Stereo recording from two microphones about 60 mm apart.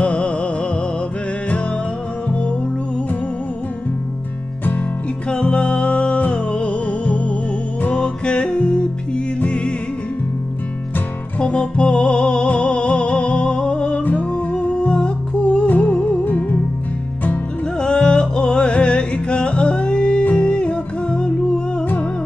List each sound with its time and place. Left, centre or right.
0.0 s music: centre
2.2 s music: centre
5.3 s music: centre
11.3 s music: centre
17.7 s music: centre